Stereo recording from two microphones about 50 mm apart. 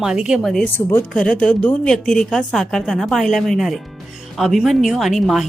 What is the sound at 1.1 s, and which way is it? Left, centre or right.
A woman's voice, centre.